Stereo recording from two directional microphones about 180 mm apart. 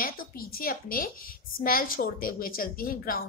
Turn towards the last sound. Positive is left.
turn(degrees=55)  # may be behind; listen again after turning